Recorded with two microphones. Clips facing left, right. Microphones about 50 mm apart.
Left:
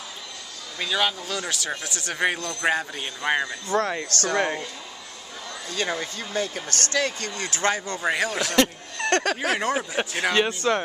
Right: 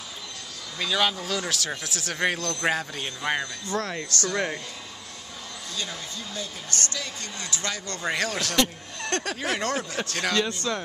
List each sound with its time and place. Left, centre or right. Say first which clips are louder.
0.7 s speech: even; centre
5.8 s speech: left 8 dB; left
7.8 s speech: left 3 dB; centre
8.5 s speech: left 5 dB; left
9.5 s speech: left 3 dB; centre
10.6 s speech: left 6 dB; left